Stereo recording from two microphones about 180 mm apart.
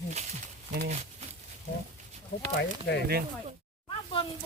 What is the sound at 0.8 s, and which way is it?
Speech, 40° right (ahead or behind).